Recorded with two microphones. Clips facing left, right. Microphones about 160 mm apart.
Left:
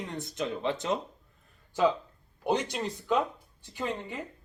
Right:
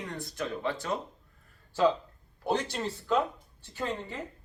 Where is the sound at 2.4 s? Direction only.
15° left (ahead or behind).